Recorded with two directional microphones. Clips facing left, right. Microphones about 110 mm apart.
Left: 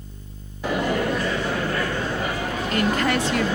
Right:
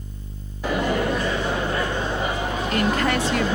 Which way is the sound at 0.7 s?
20° right (ahead or behind).